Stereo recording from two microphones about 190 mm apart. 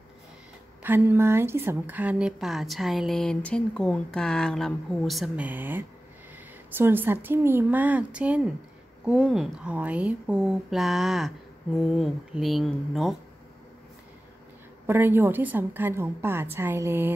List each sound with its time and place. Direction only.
0.8 s a woman's voice: 10° right (ahead or behind)
14.9 s a woman's voice: 10° right (ahead or behind)